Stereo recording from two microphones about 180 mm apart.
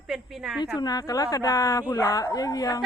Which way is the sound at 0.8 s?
20° left (ahead or behind).